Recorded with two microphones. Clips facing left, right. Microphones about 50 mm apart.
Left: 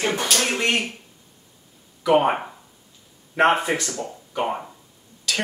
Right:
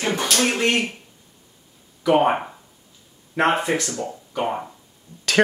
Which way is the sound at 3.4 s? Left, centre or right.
Centre.